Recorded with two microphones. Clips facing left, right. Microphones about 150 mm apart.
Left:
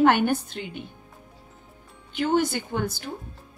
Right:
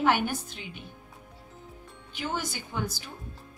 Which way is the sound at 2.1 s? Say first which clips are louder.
Left 11 dB; 60° left (ahead or behind).